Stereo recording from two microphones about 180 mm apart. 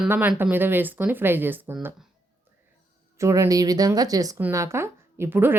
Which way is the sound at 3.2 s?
15° right (ahead or behind).